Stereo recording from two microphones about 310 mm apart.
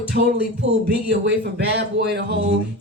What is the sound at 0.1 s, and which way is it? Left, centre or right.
Music, right.